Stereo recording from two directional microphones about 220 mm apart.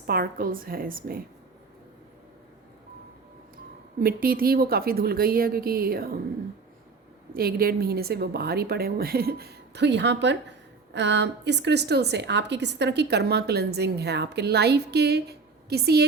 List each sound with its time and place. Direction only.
0.1 s a woman's voice: 40° right (ahead or behind)
4.0 s a woman's voice: 40° right (ahead or behind)
7.3 s a woman's voice: 45° right (ahead or behind)